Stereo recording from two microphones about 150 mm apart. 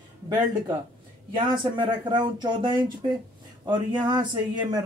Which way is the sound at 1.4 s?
30° right (ahead or behind).